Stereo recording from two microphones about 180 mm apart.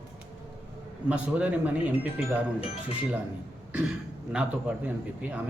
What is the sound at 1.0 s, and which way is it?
A man's voice, 5° right (ahead or behind).